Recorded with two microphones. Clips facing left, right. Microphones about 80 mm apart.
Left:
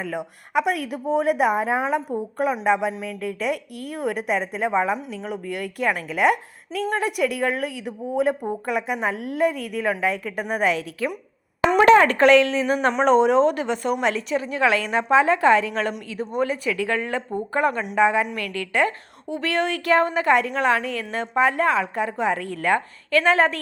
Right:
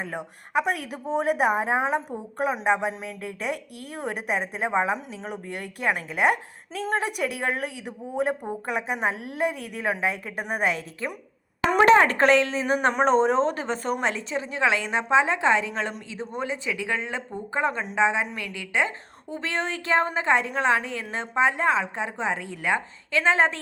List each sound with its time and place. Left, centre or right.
0.6 s speech: right
1.6 s a woman's voice: right